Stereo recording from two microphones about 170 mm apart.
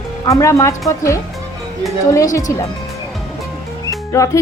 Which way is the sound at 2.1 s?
20° left (ahead or behind).